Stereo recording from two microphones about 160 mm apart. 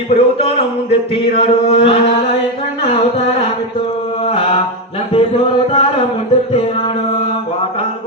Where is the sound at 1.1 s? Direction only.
35° left (ahead or behind).